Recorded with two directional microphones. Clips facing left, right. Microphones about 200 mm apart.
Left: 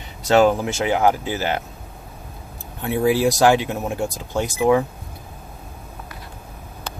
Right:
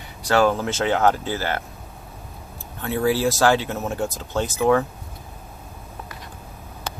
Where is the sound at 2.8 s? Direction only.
15° left (ahead or behind).